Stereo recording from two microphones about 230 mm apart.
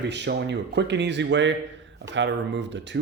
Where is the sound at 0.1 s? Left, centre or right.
Right.